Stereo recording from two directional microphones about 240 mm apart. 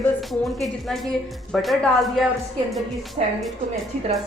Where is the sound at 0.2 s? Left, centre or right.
Centre.